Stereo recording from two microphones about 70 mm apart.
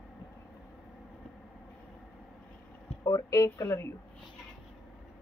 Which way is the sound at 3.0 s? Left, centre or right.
Left.